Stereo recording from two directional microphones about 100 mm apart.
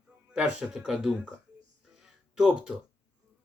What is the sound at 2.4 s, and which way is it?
Speech, 5° right (ahead or behind).